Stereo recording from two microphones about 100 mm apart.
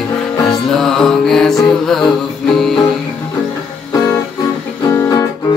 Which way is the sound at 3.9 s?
40° left (ahead or behind).